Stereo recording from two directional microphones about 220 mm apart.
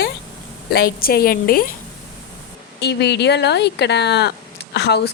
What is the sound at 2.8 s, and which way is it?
A woman's voice, 50° left (ahead or behind).